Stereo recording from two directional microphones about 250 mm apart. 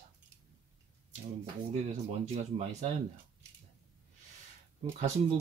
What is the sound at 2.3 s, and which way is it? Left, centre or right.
Speech, right.